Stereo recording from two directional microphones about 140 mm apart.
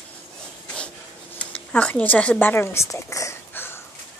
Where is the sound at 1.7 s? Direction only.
10° left (ahead or behind).